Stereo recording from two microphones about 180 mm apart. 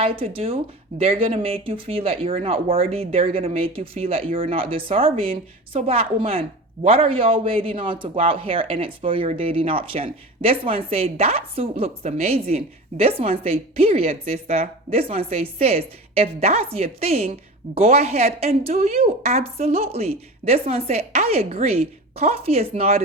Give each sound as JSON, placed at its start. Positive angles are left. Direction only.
{"t": 0.0, "sound": "a man's voice", "side_deg": -30}